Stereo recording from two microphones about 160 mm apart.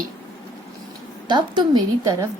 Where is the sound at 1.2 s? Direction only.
30° right (ahead or behind).